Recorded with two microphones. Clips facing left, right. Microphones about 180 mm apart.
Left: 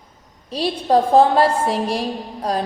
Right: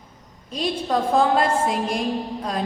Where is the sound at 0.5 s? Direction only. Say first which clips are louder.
Left 6 dB; 35° left (ahead or behind).